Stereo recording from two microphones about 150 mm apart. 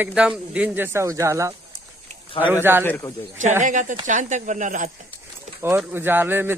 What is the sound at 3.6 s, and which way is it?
Speech, 55° right (ahead or behind).